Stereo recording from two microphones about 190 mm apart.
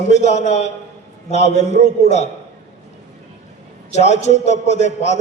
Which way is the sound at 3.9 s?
35° left (ahead or behind).